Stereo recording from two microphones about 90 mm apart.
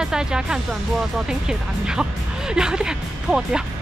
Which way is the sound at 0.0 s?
10° right (ahead or behind).